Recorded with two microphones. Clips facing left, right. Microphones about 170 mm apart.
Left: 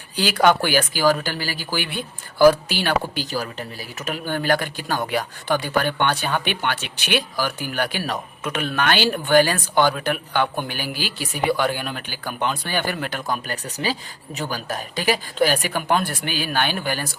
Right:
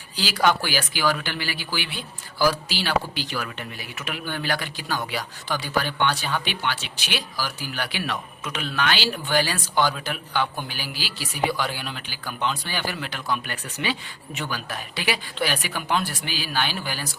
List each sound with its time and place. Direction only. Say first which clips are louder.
0.2 s speech: left 5 dB; 55° left (ahead or behind)